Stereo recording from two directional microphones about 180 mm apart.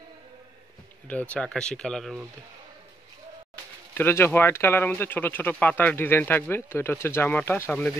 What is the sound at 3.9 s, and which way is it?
Speech, 10° left (ahead or behind).